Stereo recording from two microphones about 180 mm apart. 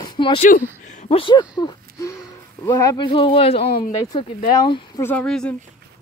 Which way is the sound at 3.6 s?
55° left (ahead or behind).